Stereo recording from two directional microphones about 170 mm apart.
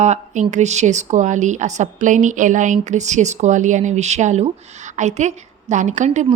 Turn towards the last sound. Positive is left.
turn(degrees=-45)  # may be behind; listen again after turning